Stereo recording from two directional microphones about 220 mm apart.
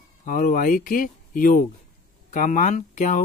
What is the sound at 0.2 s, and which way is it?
Speech, 40° left (ahead or behind).